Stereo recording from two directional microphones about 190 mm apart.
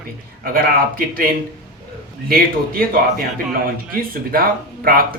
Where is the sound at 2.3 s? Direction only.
50° right (ahead or behind).